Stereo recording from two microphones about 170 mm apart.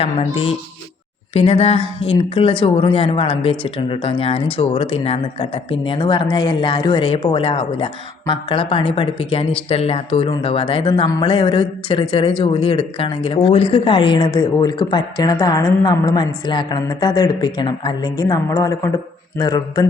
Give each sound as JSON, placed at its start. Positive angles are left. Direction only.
{"t": 0.0, "sound": "speech", "side_deg": 35}